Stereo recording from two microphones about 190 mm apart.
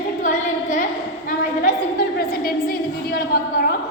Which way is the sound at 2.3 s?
50° left (ahead or behind).